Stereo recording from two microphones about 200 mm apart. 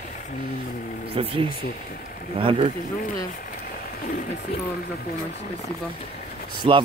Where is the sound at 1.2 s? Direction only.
25° right (ahead or behind).